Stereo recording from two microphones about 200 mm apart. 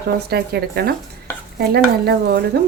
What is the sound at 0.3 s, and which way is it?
A woman's voice, 50° right (ahead or behind).